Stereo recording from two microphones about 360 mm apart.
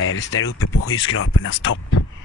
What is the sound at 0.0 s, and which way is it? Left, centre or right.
Speech, left.